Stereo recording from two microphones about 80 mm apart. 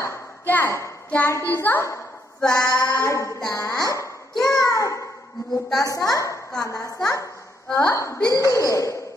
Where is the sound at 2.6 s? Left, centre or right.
Left.